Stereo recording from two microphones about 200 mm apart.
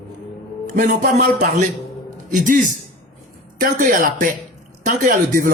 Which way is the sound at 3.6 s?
45° right (ahead or behind).